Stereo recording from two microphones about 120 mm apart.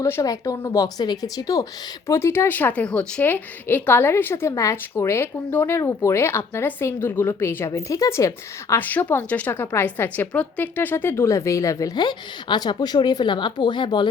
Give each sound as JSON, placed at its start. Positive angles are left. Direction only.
{"t": 0.0, "sound": "speech", "side_deg": 25}
{"t": 8.7, "sound": "speech", "side_deg": 15}